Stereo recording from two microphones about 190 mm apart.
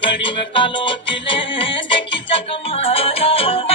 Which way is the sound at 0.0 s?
25° left (ahead or behind).